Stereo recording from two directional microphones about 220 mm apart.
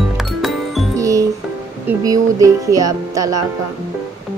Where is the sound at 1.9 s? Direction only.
15° right (ahead or behind).